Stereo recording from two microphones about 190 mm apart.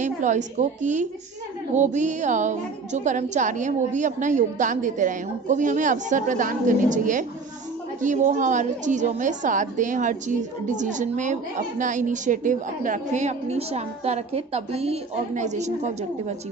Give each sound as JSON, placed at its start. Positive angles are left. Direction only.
{"t": 0.0, "sound": "a woman's voice", "side_deg": -40}